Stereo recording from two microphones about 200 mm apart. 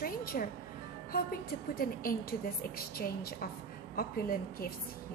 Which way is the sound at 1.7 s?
45° left (ahead or behind).